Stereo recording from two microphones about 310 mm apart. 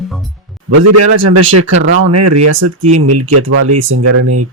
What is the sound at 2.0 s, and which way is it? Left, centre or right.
Speech, right.